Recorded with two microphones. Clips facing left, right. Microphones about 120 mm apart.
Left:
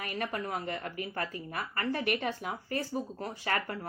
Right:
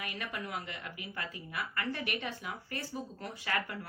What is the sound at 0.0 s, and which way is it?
Speech, 40° left (ahead or behind).